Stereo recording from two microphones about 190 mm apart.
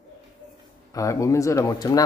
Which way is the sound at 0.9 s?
15° left (ahead or behind).